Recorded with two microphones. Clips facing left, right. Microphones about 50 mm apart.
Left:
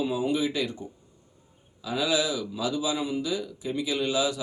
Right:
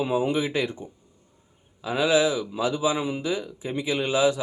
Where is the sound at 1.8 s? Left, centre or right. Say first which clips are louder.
Right 5 dB; right.